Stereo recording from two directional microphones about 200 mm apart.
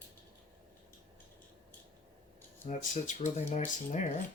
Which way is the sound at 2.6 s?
35° left (ahead or behind).